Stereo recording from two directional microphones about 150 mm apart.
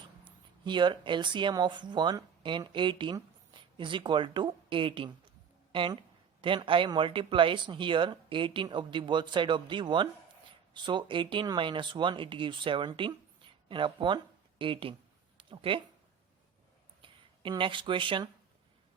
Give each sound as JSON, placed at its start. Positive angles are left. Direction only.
{"t": 0.6, "sound": "speech", "side_deg": -30}
{"t": 17.0, "sound": "speech", "side_deg": -35}